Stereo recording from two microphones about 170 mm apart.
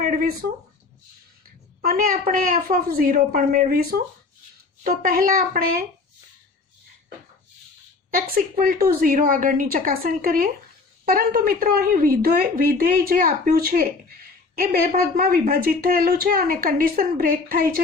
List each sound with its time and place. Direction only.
0.0 s a sound: 55° right (ahead or behind)
1.8 s a woman's voice: 60° right (ahead or behind)
8.1 s a woman's voice: 55° right (ahead or behind)